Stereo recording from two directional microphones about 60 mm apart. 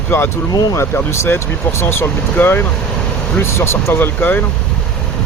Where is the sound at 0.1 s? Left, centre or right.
Left.